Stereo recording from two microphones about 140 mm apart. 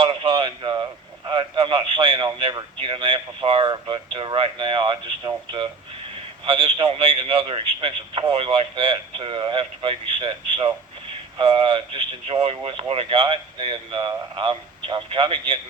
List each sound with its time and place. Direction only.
0.0 s radio: 35° right (ahead or behind)
6.4 s a man's voice: 35° right (ahead or behind)